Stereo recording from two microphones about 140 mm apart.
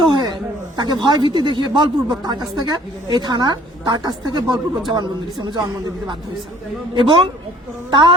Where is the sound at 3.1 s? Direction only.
30° right (ahead or behind).